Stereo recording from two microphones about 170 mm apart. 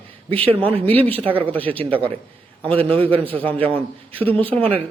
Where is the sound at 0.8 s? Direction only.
35° right (ahead or behind).